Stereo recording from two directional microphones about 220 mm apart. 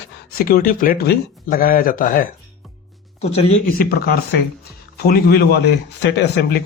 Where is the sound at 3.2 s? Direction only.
30° left (ahead or behind).